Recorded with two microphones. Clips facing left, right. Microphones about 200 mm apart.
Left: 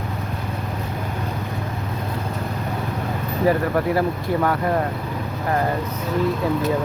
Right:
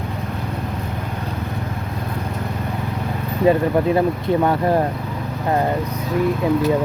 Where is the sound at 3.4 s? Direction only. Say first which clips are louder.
Right 4 dB; 20° right (ahead or behind).